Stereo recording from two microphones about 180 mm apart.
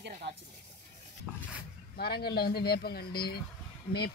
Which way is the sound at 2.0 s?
60° left (ahead or behind).